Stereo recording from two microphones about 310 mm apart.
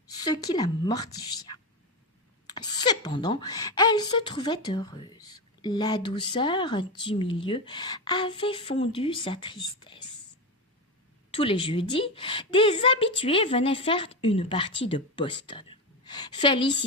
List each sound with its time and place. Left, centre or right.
0.1 s a woman's voice: centre
11.3 s a woman's voice: centre